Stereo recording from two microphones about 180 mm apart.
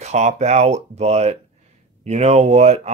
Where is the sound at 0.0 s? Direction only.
40° right (ahead or behind).